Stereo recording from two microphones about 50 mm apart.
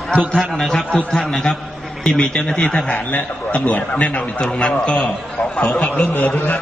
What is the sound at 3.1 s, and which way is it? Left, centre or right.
A man's voice, left.